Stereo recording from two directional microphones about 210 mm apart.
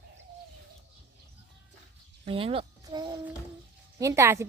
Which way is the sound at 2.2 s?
25° right (ahead or behind).